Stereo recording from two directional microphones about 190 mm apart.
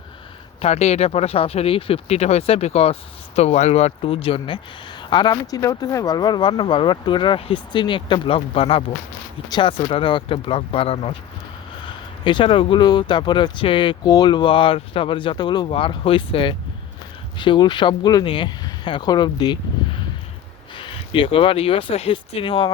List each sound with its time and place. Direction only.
0.6 s speech: 35° left (ahead or behind)